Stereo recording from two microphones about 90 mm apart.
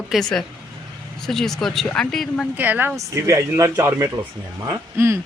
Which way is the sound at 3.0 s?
35° right (ahead or behind).